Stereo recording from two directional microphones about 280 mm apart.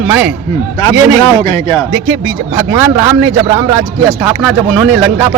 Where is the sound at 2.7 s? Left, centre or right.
Centre.